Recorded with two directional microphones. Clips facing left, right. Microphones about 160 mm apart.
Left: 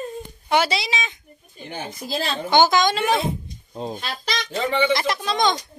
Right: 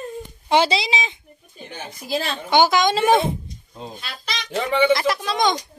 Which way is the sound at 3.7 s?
40° left (ahead or behind).